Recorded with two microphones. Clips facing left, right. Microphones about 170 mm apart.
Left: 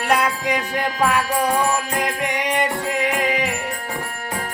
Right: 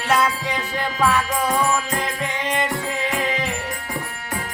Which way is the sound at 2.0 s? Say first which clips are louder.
Left 3 dB; 15° left (ahead or behind).